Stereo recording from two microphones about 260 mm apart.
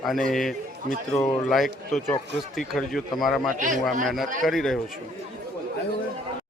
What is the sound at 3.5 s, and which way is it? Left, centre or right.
Speech, right.